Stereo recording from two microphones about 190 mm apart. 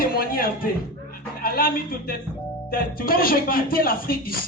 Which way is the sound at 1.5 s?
50° left (ahead or behind).